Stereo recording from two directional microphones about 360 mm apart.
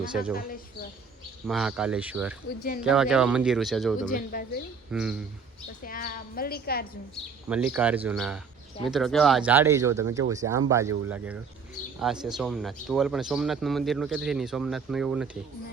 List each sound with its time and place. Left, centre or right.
0.3 s a woman's voice: left
1.5 s speech: centre
2.5 s a woman's voice: left
2.8 s speech: centre
4.1 s a woman's voice: left
4.9 s speech: centre
5.8 s a woman's voice: left
7.4 s speech: centre